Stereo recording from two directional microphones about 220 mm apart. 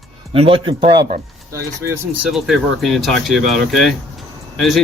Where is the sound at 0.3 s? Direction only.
25° right (ahead or behind).